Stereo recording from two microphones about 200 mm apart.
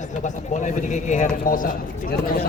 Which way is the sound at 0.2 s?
35° left (ahead or behind).